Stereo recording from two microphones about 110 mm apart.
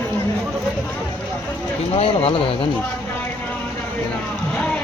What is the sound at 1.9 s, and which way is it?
Speech, 60° left (ahead or behind).